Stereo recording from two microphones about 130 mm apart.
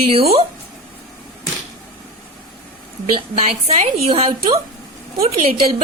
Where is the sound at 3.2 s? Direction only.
50° right (ahead or behind).